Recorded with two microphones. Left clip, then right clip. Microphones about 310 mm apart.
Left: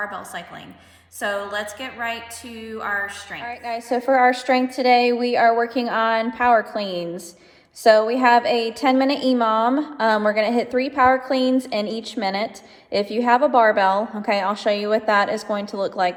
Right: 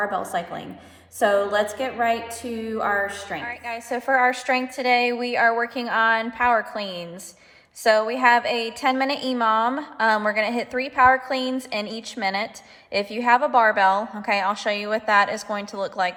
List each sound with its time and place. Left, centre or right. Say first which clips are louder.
0.0 s a woman's voice: right 5 dB; centre
3.8 s speech: left 3 dB; right